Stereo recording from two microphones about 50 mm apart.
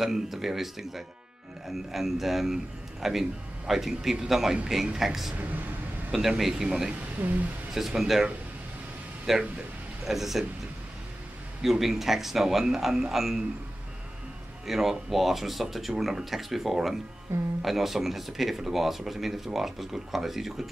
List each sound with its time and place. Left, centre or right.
0.0 s speech: centre
6.7 s speech: right
7.2 s speech: right
7.7 s speech: centre
11.6 s speech: centre
14.7 s speech: centre